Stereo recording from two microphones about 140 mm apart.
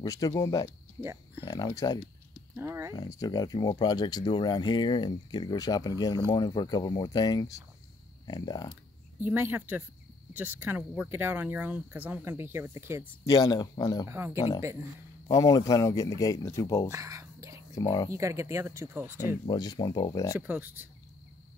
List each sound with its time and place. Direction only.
0.0 s speech: 25° left (ahead or behind)
2.5 s speech: 20° right (ahead or behind)
2.9 s speech: 30° left (ahead or behind)
9.2 s speech: 15° right (ahead or behind)
13.2 s speech: 30° left (ahead or behind)
14.0 s speech: 15° right (ahead or behind)
15.2 s speech: 25° left (ahead or behind)
16.9 s a sound: 20° right (ahead or behind)
17.7 s speech: 25° left (ahead or behind)
18.1 s speech: 20° right (ahead or behind)
19.5 s speech: 30° left (ahead or behind)
20.3 s speech: 10° right (ahead or behind)